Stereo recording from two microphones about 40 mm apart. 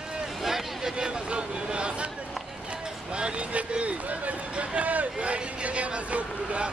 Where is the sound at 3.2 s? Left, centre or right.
Right.